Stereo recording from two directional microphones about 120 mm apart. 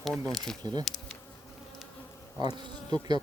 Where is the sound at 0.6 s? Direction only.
35° right (ahead or behind).